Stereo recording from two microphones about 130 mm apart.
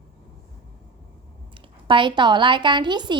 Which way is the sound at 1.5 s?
40° right (ahead or behind).